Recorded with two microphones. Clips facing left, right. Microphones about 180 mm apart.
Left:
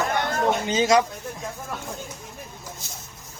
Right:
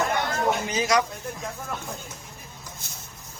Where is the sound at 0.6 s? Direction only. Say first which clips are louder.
Left 4 dB; 25° left (ahead or behind).